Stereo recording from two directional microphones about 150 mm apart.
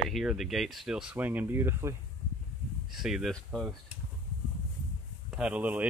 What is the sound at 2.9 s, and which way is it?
Speech, centre (ahead or behind).